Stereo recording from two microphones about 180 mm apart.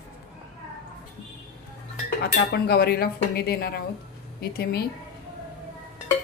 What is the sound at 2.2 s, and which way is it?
Speech, 60° left (ahead or behind).